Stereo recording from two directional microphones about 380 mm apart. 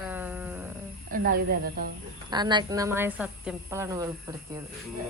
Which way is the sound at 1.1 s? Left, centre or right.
Right.